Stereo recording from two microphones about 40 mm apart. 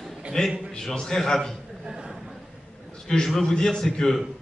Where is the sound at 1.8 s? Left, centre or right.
Centre.